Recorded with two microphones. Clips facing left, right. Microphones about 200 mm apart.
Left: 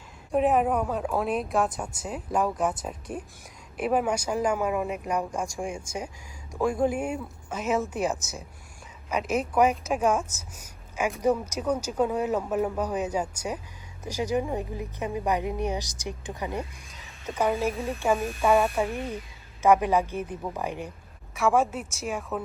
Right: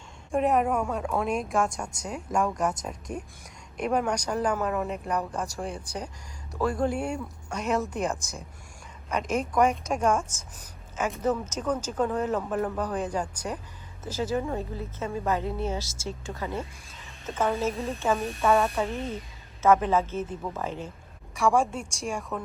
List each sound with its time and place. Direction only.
0.3 s speech: centre (ahead or behind)
18.2 s speech: centre (ahead or behind)
19.6 s speech: 15° left (ahead or behind)
21.3 s speech: centre (ahead or behind)